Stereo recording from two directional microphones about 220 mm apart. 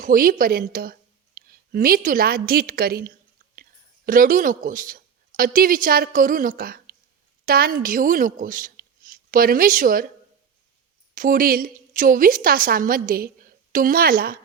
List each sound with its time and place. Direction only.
0.0 s a woman's voice: 40° right (ahead or behind)
11.1 s a woman's voice: 40° right (ahead or behind)